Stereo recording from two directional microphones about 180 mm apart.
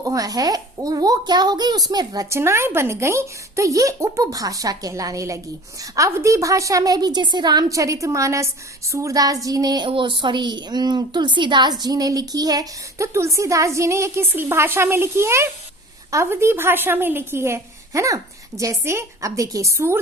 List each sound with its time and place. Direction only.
0.0 s a woman's voice: 20° right (ahead or behind)